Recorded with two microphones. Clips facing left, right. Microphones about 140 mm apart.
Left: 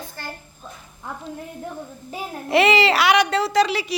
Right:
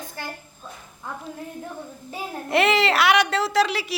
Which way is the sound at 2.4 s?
Centre (ahead or behind).